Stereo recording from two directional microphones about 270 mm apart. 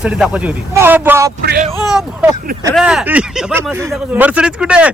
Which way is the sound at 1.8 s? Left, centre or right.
Centre.